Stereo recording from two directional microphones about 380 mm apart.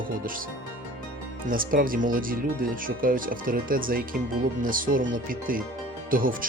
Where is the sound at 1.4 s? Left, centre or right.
Right.